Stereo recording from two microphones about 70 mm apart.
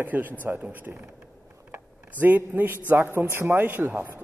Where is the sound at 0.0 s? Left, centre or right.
Right.